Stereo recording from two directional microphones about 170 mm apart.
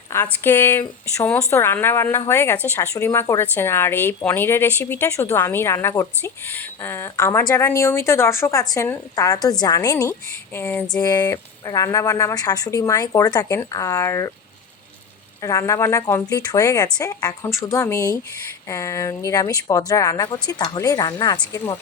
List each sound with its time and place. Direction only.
0.1 s a woman's voice: 15° left (ahead or behind)
11.0 s speech: 20° left (ahead or behind)
15.4 s a woman's voice: 20° left (ahead or behind)